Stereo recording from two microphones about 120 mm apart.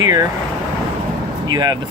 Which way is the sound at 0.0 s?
30° right (ahead or behind).